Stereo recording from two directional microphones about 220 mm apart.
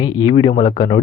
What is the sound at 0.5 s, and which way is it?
Speech, 35° left (ahead or behind).